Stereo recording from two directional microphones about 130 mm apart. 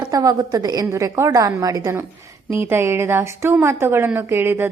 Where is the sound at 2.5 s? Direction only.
20° right (ahead or behind).